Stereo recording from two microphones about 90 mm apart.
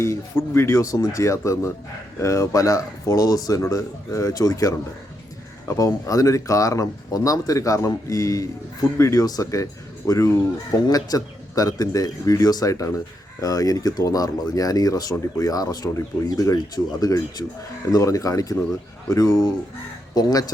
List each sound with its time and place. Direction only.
0.0 s speech: 30° left (ahead or behind)